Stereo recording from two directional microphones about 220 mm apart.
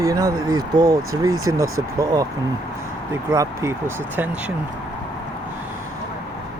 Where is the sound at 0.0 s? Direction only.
15° right (ahead or behind).